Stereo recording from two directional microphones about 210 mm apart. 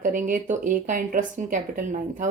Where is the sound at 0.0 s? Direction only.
40° right (ahead or behind).